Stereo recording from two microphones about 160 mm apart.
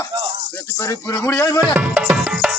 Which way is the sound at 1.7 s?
10° right (ahead or behind).